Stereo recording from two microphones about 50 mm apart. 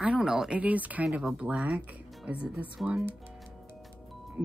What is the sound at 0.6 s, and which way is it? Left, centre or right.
A woman's voice, right.